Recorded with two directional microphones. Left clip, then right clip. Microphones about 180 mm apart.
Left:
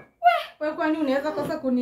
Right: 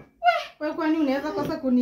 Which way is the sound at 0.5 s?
20° right (ahead or behind).